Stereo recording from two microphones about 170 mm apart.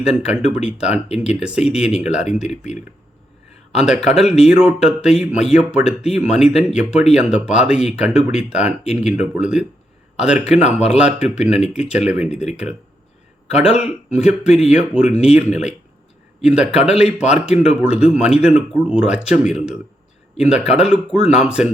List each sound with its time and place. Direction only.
0.0 s speech: 5° right (ahead or behind)
3.8 s speech: 5° right (ahead or behind)
6.0 s speech: 40° left (ahead or behind)
6.7 s speech: 5° right (ahead or behind)
10.6 s speech: 40° left (ahead or behind)
10.9 s speech: 5° right (ahead or behind)